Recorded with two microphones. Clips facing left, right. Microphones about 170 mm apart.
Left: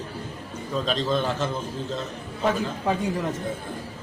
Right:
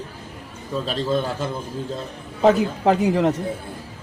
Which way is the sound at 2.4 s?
75° right (ahead or behind).